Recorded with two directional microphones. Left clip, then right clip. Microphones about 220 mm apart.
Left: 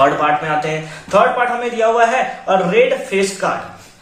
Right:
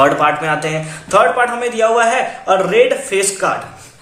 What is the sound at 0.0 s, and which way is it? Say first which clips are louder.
A man's voice: right 1 dB; 50° right (ahead or behind).